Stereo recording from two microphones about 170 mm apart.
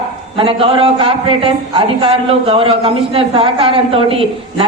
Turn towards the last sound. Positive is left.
turn(degrees=-35)  # may be behind; listen again after turning